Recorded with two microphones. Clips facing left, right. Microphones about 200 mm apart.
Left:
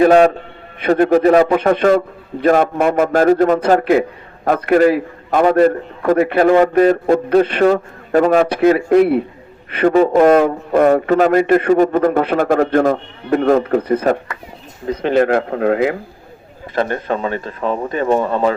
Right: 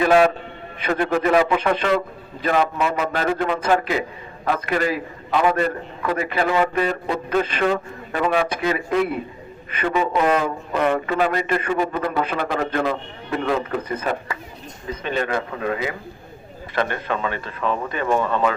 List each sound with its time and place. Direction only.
0.0 s speech: 40° left (ahead or behind)
1.5 s a man's voice: 50° left (ahead or behind)
3.7 s a man's voice: 50° left (ahead or behind)
7.6 s a man's voice: 40° left (ahead or behind)
8.4 s speech: 65° left (ahead or behind)
9.8 s a man's voice: 40° left (ahead or behind)
14.8 s speech: 80° left
16.7 s speech: 35° left (ahead or behind)